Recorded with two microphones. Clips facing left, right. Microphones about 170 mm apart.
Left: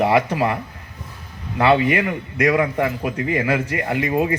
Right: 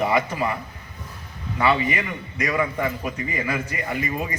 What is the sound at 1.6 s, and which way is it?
A man's voice, 65° left (ahead or behind).